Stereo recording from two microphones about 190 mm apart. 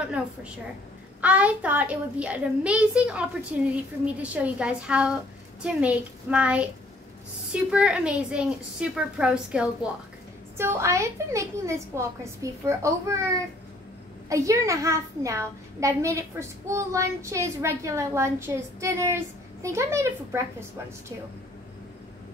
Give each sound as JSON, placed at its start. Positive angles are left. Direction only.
{"t": 1.2, "sound": "a child's voice", "side_deg": -5}
{"t": 14.3, "sound": "a child's voice", "side_deg": -15}